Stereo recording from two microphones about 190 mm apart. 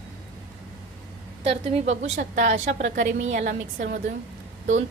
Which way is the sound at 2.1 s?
45° right (ahead or behind).